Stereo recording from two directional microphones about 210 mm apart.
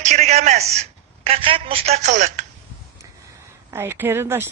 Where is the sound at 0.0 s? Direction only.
35° right (ahead or behind).